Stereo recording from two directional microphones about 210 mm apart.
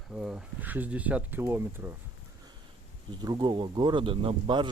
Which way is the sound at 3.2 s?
20° right (ahead or behind).